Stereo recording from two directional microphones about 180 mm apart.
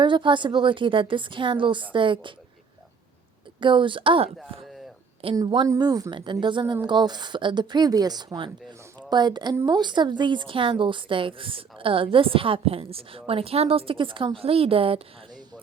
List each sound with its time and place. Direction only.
0.0 s a woman's voice: 25° right (ahead or behind)
3.6 s a woman's voice: 25° right (ahead or behind)